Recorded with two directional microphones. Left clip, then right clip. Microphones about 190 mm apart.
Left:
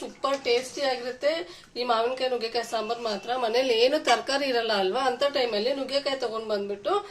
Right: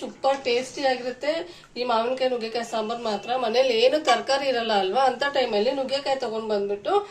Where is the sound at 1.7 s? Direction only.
50° left (ahead or behind).